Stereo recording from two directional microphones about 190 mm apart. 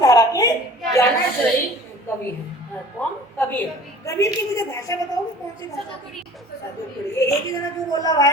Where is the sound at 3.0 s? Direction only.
10° left (ahead or behind).